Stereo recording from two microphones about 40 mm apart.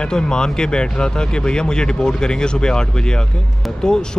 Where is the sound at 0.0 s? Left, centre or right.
Centre.